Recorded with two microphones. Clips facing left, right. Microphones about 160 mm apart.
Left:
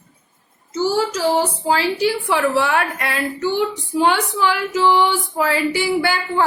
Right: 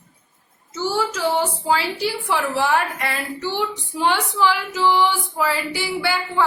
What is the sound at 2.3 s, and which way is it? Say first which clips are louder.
A woman's voice: even; 60° left (ahead or behind).